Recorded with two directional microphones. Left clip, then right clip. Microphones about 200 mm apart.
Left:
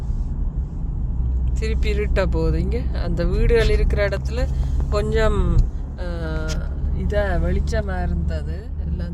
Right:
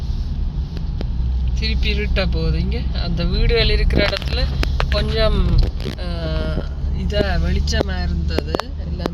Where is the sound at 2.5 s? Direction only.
60° left (ahead or behind).